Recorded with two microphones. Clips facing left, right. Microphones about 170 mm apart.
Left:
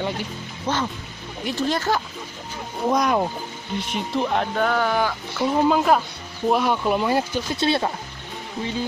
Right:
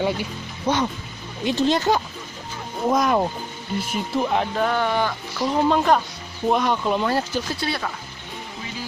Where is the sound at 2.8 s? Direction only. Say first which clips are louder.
Right 1 dB; centre (ahead or behind).